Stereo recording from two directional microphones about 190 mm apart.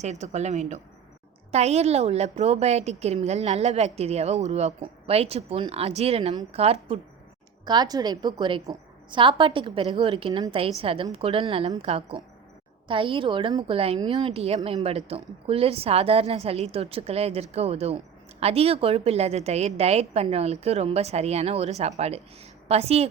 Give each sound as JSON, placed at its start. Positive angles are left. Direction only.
{"t": 0.0, "sound": "a woman's voice", "side_deg": -35}